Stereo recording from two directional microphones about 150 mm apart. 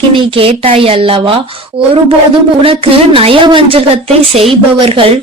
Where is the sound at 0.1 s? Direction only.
35° right (ahead or behind).